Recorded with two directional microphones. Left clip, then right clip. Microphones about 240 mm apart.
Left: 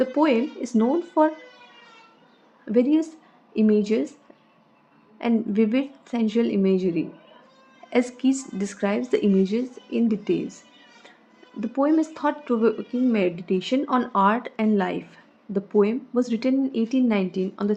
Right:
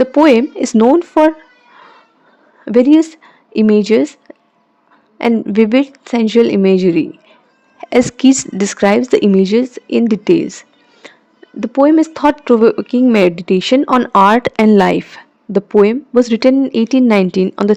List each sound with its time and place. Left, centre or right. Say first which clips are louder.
0.0 s speech: right 12 dB; right
2.6 s a woman's voice: right 12 dB; right
11.0 s cat: right 17 dB; right
11.6 s speech: right 12 dB; right